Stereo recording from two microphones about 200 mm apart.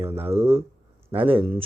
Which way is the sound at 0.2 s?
30° right (ahead or behind).